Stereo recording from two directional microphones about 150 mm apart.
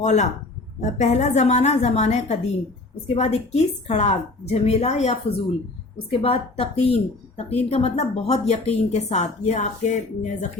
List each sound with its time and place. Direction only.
0.0 s a woman's voice: 50° left (ahead or behind)